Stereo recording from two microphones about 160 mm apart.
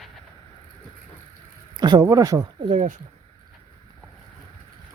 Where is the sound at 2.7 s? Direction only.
50° right (ahead or behind).